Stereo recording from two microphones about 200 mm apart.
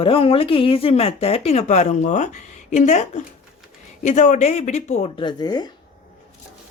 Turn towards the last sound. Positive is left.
turn(degrees=20)  # may be behind; listen again after turning